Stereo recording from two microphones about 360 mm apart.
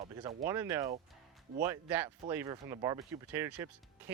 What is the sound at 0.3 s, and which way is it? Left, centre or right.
Speech, centre.